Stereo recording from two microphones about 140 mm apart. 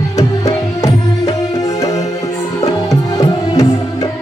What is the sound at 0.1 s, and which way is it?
Music, 25° left (ahead or behind).